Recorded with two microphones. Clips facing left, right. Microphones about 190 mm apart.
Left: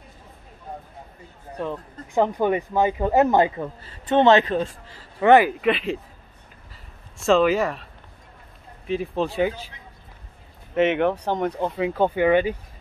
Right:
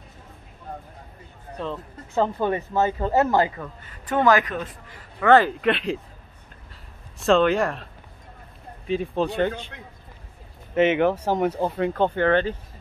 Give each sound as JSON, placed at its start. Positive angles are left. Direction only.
{"t": 1.6, "sound": "speech", "side_deg": 15}
{"t": 5.3, "sound": "speech", "side_deg": 10}
{"t": 6.7, "sound": "a sound", "side_deg": 0}
{"t": 8.8, "sound": "speech", "side_deg": 0}
{"t": 10.7, "sound": "speech", "side_deg": 0}